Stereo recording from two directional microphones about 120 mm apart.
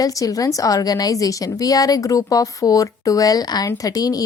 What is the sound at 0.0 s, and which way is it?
Speech, 30° left (ahead or behind).